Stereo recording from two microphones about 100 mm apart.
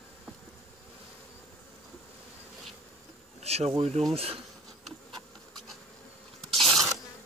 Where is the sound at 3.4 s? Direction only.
90° right.